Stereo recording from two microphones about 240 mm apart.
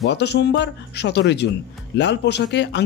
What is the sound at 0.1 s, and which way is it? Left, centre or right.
Speech, left.